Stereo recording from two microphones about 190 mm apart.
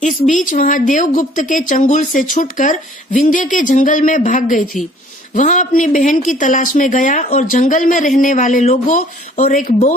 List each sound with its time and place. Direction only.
0.0 s a woman's voice: 40° left (ahead or behind)